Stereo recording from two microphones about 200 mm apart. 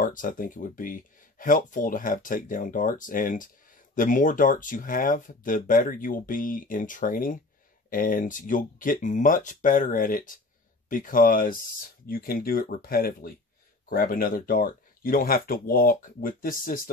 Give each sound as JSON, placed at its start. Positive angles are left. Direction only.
{"t": 0.0, "sound": "speech", "side_deg": 40}